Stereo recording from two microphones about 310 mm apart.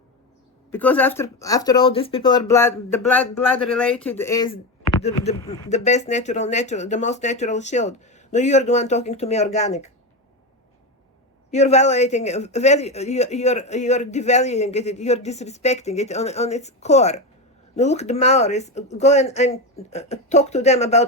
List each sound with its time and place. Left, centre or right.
0.7 s speech: centre; by 9.9 s left
11.5 s speech: left